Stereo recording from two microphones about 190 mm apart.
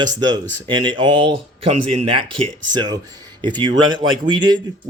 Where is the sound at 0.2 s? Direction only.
20° right (ahead or behind).